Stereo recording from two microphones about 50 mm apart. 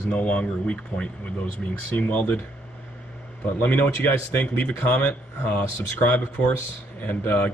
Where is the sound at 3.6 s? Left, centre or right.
Left.